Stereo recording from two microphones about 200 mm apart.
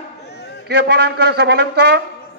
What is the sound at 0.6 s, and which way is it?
A man's voice, 55° right (ahead or behind).